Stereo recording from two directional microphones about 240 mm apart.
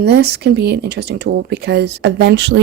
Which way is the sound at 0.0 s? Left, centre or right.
Right.